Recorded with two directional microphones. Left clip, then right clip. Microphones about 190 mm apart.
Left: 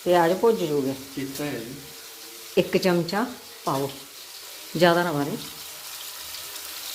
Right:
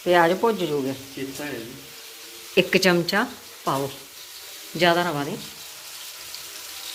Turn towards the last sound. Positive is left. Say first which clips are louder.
# even
turn(degrees=5)  # may be behind; listen again after turning